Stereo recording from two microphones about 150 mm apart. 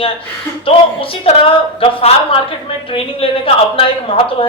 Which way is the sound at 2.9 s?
35° left (ahead or behind).